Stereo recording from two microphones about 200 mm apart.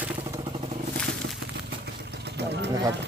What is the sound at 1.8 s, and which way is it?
Vehicle, 55° right (ahead or behind).